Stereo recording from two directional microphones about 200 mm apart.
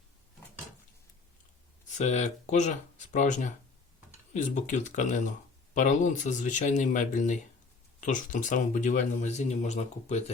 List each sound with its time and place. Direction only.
1.9 s speech: 35° left (ahead or behind)